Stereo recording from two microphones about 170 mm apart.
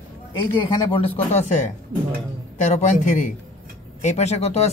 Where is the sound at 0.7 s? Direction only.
30° left (ahead or behind).